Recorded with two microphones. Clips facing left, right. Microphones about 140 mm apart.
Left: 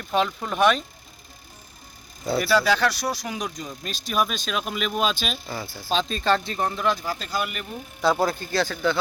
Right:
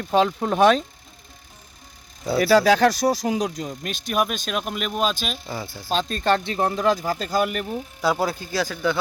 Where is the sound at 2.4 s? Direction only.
40° right (ahead or behind).